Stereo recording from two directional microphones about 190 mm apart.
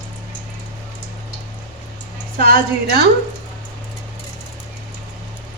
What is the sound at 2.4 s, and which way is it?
Speech, 55° right (ahead or behind).